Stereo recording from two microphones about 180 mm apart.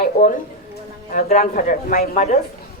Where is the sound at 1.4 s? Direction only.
50° left (ahead or behind).